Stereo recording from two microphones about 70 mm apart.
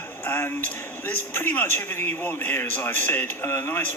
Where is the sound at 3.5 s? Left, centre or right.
Left.